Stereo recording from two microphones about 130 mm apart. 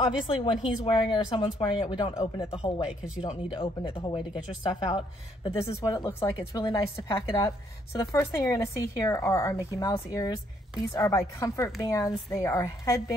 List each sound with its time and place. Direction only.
0.3 s speech: 40° left (ahead or behind)
5.7 s speech: 25° left (ahead or behind)
7.9 s speech: 25° left (ahead or behind)